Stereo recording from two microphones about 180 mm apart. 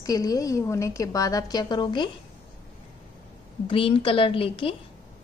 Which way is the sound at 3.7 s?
30° left (ahead or behind).